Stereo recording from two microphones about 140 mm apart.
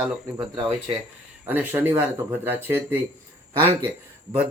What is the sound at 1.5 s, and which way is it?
Speech, 15° right (ahead or behind).